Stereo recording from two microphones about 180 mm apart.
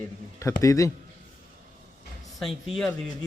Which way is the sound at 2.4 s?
Centre (ahead or behind).